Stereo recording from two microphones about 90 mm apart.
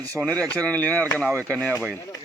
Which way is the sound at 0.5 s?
15° left (ahead or behind).